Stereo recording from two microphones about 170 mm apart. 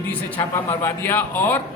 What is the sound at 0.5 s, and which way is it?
A man's voice, 15° left (ahead or behind).